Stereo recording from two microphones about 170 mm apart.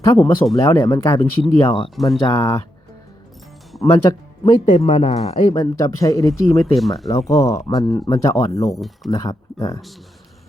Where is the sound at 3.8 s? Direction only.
20° left (ahead or behind).